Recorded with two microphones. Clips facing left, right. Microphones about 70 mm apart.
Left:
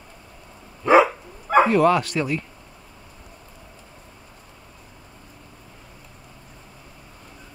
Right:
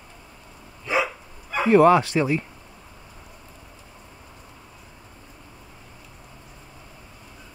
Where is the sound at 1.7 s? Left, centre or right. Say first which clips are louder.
Right 3 dB; right.